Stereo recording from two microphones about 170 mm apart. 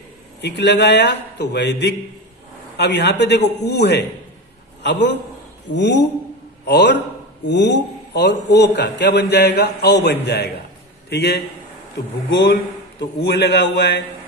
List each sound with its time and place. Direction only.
0.4 s a man's voice: 85° left
4.8 s a man's voice: 90° left
13.0 s a man's voice: 75° left (ahead or behind)